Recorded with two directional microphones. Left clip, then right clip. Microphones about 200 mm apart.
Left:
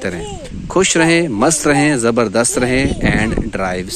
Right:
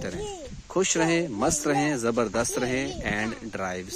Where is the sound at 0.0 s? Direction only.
5° left (ahead or behind).